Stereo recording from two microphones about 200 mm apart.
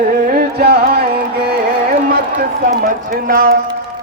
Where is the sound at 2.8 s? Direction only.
45° right (ahead or behind).